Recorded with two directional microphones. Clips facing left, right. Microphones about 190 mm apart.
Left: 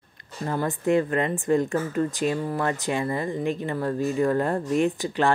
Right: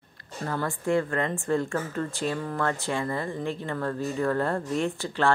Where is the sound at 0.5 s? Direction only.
20° left (ahead or behind).